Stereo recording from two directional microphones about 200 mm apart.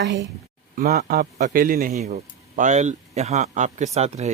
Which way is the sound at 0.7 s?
50° right (ahead or behind).